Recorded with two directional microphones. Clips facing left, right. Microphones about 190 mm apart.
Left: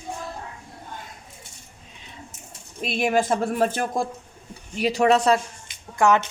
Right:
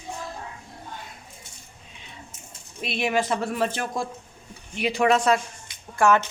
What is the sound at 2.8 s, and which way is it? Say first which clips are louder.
Speech: left 3 dB; 45° left (ahead or behind).